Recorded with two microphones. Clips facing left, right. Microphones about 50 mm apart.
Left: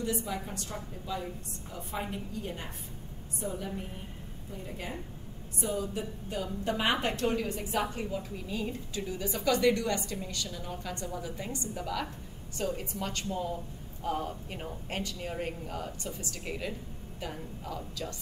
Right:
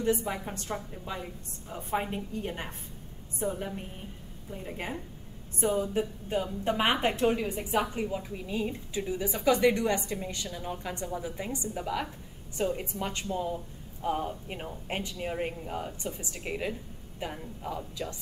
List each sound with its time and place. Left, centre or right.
0.0 s a woman's voice: right